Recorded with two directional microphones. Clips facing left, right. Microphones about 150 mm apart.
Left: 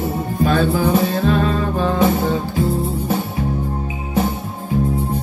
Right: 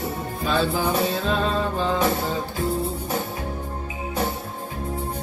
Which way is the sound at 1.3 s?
55° left (ahead or behind).